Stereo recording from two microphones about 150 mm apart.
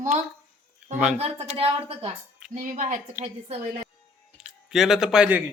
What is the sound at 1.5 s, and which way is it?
Speech, 40° right (ahead or behind).